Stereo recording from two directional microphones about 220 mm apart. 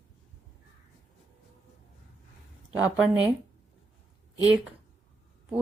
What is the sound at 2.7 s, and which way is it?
Speech, 5° right (ahead or behind).